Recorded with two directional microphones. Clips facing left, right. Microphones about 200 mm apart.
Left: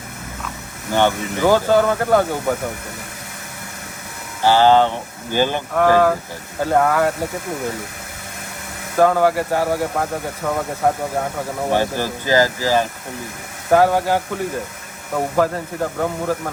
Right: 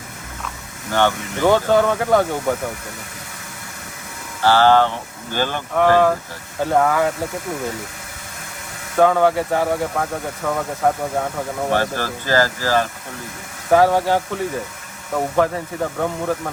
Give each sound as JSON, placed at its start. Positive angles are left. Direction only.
{"t": 0.9, "sound": "speech", "side_deg": 15}
{"t": 4.4, "sound": "speech", "side_deg": 15}
{"t": 5.7, "sound": "speech", "side_deg": 5}
{"t": 9.0, "sound": "speech", "side_deg": 5}
{"t": 11.7, "sound": "speech", "side_deg": 15}
{"t": 13.7, "sound": "speech", "side_deg": 0}